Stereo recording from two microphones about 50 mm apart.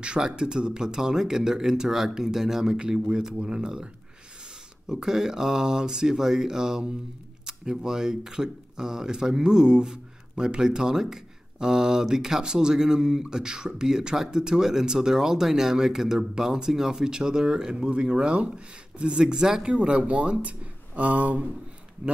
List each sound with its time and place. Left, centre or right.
0.0 s speech: centre
4.9 s speech: centre; by 21.5 s right